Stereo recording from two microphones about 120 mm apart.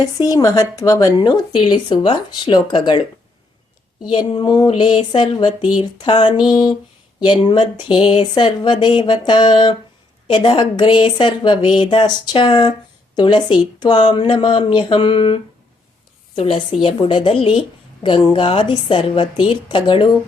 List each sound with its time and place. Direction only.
0.0 s a woman's voice: 30° left (ahead or behind)
4.3 s a woman's voice: 35° left (ahead or behind)